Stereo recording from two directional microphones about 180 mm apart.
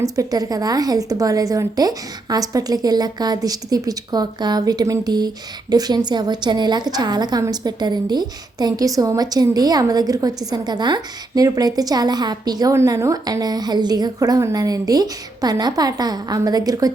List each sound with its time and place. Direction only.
0.0 s a woman's voice: 20° right (ahead or behind)